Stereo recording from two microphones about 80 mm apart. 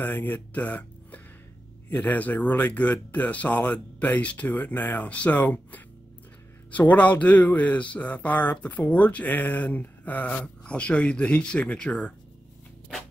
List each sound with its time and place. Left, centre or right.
0.0 s speech: left